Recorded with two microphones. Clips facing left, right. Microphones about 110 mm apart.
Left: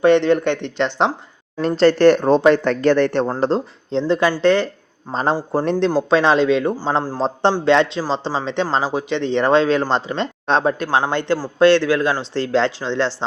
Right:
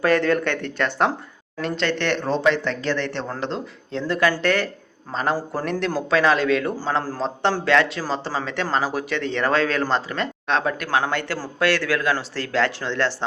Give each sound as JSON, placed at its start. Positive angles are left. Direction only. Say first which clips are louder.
{"t": 0.0, "sound": "speech", "louder": "left 5 dB", "side_deg": 25}
{"t": 1.6, "sound": "speech", "louder": "left 11 dB", "side_deg": 35}
{"t": 3.2, "sound": "speech", "louder": "left 9 dB", "side_deg": 35}
{"t": 7.2, "sound": "speech", "louder": "left 5 dB", "side_deg": 35}